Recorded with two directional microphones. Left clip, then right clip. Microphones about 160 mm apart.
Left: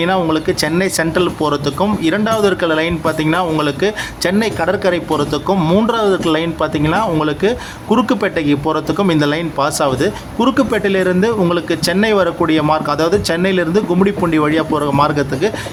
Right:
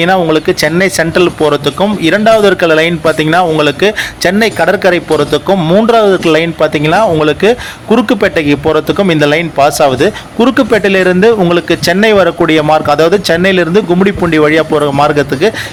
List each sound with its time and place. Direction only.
0.0 s speech: 25° right (ahead or behind)
5.5 s speech: 10° right (ahead or behind)